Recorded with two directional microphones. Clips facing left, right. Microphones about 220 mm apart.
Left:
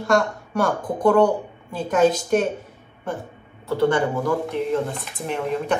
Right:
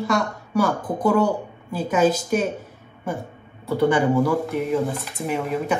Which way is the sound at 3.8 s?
15° right (ahead or behind).